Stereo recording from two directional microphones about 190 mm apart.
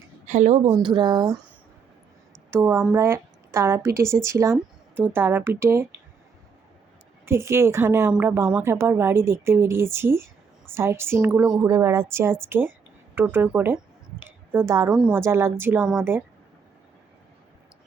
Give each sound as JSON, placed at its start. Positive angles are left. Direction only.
{"t": 0.3, "sound": "a woman's voice", "side_deg": -40}
{"t": 0.7, "sound": "speech", "side_deg": -25}
{"t": 2.5, "sound": "a woman's voice", "side_deg": -15}
{"t": 7.3, "sound": "a woman's voice", "side_deg": -15}
{"t": 14.2, "sound": "a sound", "side_deg": -10}
{"t": 14.9, "sound": "a woman's voice", "side_deg": -10}